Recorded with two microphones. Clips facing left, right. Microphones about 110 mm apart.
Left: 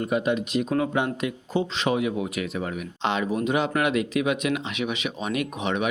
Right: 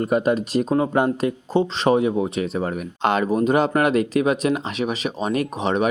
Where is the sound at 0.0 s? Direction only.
40° right (ahead or behind).